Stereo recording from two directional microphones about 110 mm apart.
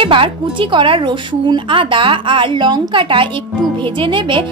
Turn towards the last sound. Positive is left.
turn(degrees=-50)  # may be behind; listen again after turning